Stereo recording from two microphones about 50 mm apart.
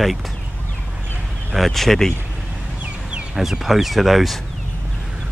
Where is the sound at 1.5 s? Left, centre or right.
Centre.